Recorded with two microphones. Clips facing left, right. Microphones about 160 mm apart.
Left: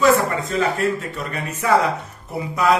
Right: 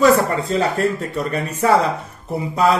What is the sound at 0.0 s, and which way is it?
Speech, 35° right (ahead or behind).